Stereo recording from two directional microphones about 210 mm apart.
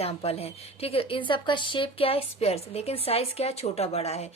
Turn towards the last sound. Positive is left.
turn(degrees=30)  # may be behind; listen again after turning